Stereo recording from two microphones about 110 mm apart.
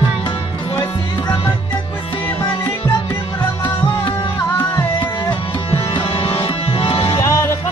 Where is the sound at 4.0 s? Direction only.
45° left (ahead or behind).